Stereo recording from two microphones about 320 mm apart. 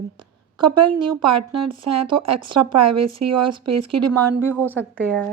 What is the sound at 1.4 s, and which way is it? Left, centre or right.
Speech, right.